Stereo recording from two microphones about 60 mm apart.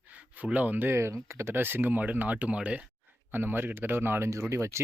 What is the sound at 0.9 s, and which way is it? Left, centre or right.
Speech, right.